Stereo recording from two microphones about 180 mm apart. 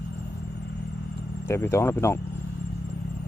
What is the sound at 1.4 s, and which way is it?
Speech, 15° left (ahead or behind).